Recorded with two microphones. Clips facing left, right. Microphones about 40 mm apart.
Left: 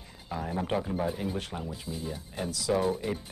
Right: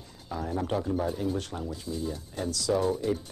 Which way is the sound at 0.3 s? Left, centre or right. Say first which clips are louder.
Right 1 dB; centre.